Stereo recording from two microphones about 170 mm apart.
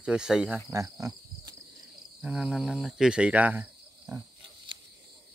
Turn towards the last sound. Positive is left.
turn(degrees=-10)  # may be behind; listen again after turning